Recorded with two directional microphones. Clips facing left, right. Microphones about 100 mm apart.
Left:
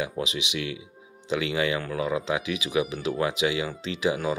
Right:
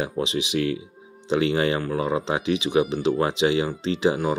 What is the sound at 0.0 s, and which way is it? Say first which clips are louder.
Speech: right 4 dB; 35° right (ahead or behind).